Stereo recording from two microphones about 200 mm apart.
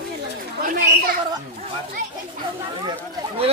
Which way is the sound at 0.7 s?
50° right (ahead or behind).